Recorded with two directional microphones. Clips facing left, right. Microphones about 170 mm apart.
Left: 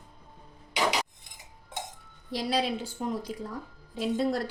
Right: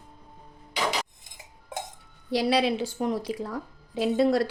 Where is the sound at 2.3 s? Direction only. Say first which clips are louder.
Right 5 dB; 80° right.